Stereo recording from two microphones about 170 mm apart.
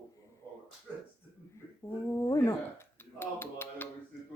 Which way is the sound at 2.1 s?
15° left (ahead or behind).